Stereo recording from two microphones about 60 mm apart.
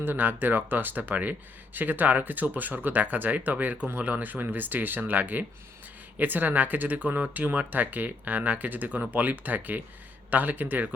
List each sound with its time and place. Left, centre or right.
0.0 s speech: right